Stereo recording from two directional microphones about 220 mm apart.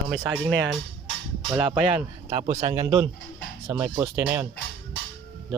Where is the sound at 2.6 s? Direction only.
15° right (ahead or behind).